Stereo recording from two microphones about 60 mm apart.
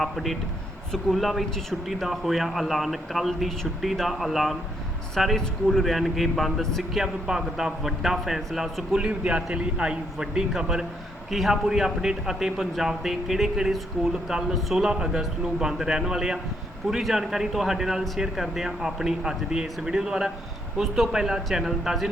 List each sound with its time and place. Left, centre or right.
0.0 s a man's voice: centre
9.0 s a man's voice: centre